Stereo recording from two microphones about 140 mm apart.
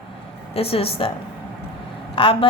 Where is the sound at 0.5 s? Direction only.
45° left (ahead or behind).